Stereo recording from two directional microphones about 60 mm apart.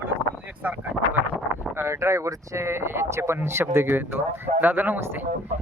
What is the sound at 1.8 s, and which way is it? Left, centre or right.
Speech, right.